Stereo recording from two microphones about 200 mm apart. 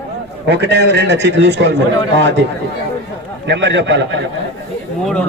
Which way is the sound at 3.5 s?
60° right (ahead or behind).